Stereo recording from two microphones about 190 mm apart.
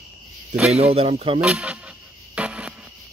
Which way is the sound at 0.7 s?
30° right (ahead or behind).